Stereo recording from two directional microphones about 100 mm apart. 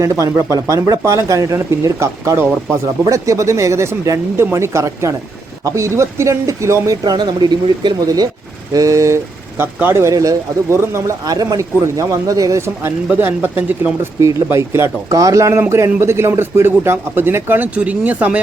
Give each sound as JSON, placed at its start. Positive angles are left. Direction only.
{"t": 0.0, "sound": "speech", "side_deg": -30}
{"t": 14.2, "sound": "speech", "side_deg": -30}